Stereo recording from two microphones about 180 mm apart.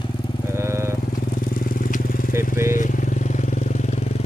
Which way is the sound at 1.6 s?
50° left (ahead or behind).